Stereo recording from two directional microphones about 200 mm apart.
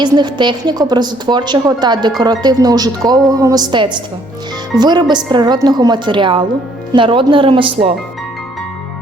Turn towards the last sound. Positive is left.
turn(degrees=-25)  # may be behind; listen again after turning